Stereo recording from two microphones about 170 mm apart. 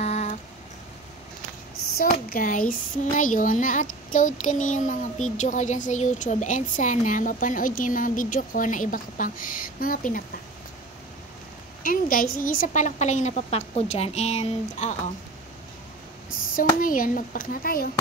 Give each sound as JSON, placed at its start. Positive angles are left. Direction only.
{"t": 0.0, "sound": "a sound", "side_deg": 40}
{"t": 2.2, "sound": "child singing", "side_deg": 55}
{"t": 11.8, "sound": "child singing", "side_deg": 55}
{"t": 16.5, "sound": "speech", "side_deg": 55}